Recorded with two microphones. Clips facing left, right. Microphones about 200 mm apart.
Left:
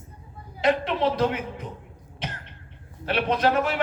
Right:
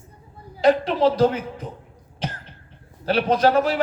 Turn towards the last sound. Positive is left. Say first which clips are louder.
# right 4 dB
turn(degrees=-35)  # may be behind; listen again after turning